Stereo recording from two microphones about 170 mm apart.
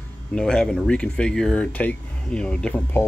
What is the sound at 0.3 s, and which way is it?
Speech, 5° left (ahead or behind).